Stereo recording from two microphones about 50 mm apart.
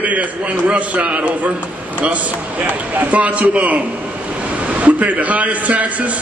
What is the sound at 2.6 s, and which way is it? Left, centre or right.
A man's voice, right.